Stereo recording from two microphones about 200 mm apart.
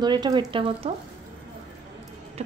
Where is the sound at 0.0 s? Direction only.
20° right (ahead or behind).